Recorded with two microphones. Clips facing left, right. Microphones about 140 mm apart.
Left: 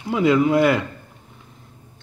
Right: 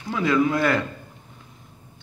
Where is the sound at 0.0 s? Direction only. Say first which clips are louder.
Left 4 dB; 20° left (ahead or behind).